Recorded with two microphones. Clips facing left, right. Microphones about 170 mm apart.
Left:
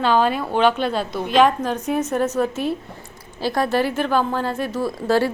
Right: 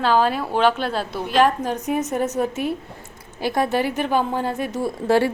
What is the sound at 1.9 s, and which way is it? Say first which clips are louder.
A woman's voice: left 2 dB; 15° right (ahead or behind).